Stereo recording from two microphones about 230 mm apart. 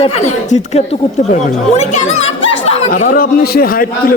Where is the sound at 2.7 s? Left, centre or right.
Left.